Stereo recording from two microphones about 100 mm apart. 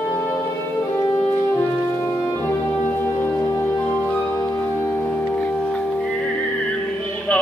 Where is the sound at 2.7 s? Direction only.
20° left (ahead or behind).